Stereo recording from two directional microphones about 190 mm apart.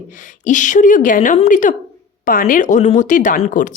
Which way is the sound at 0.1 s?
40° left (ahead or behind).